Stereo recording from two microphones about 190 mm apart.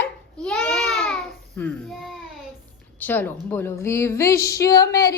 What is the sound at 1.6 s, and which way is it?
A woman's voice, 10° left (ahead or behind).